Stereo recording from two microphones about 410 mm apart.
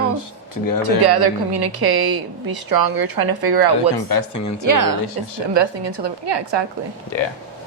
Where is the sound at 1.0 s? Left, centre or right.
Right.